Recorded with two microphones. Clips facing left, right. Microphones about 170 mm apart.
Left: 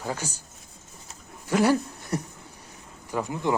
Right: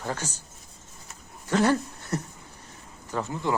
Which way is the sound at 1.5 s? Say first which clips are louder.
Left 1 dB; 10° left (ahead or behind).